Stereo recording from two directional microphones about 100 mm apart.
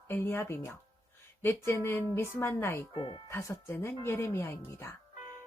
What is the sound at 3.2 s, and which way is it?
Speech, 30° left (ahead or behind).